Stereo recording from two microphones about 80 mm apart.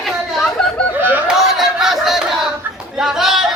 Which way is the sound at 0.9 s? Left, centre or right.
Right.